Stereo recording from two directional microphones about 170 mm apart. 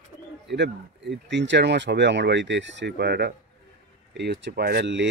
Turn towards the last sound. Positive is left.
turn(degrees=-90)